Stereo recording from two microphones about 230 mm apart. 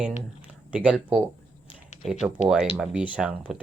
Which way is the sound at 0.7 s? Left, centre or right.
Centre.